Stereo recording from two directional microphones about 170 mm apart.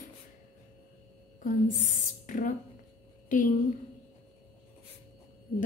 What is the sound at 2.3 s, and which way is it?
Speech, 50° left (ahead or behind).